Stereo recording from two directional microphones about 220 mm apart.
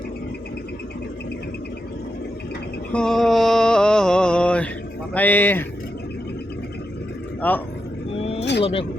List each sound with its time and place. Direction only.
2.9 s mantra: 5° left (ahead or behind)
5.1 s speech: 10° left (ahead or behind)
7.4 s speech: 10° left (ahead or behind)
8.1 s vehicle: 25° left (ahead or behind)
8.6 s speech: 25° left (ahead or behind)